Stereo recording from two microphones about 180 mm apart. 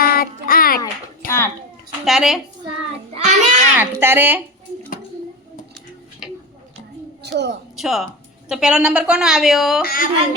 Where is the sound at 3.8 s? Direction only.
10° right (ahead or behind).